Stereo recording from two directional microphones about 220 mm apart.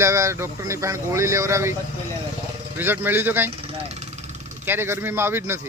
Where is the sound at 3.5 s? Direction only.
25° right (ahead or behind).